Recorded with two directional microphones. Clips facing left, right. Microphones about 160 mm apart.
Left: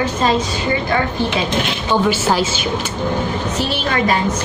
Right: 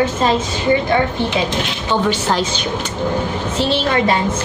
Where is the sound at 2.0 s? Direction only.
5° left (ahead or behind).